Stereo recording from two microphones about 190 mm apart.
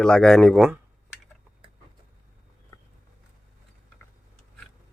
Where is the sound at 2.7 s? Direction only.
20° left (ahead or behind).